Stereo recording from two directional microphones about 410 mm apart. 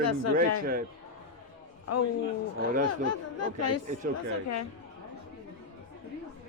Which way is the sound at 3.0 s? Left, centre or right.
Left.